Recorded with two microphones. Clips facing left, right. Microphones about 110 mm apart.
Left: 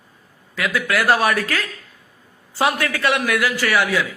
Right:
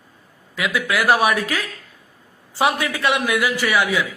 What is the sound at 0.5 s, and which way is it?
A man's voice, 15° right (ahead or behind).